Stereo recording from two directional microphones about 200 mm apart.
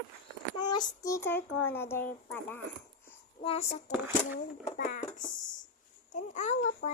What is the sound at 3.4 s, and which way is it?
A child's voice, 30° left (ahead or behind).